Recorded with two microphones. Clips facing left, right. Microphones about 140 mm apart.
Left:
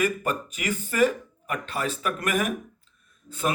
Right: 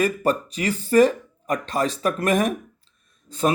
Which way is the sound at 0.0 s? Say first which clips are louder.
Right 5 dB; 35° right (ahead or behind).